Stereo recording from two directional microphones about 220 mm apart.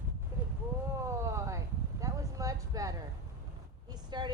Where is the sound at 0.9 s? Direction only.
15° right (ahead or behind).